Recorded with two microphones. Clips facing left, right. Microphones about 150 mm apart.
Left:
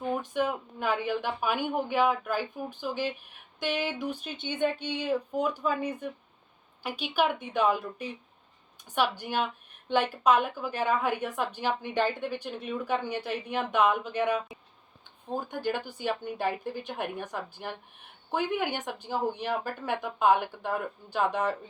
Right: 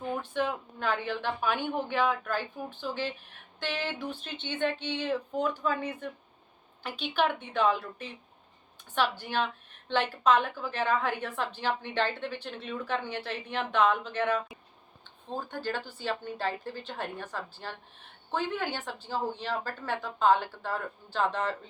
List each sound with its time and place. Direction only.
0.1 s a woman's voice: 10° left (ahead or behind)